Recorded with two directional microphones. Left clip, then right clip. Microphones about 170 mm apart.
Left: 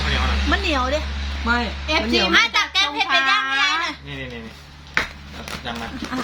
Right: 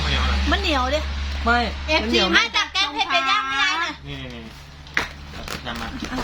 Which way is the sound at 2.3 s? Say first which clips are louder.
Left 2 dB; 10° left (ahead or behind).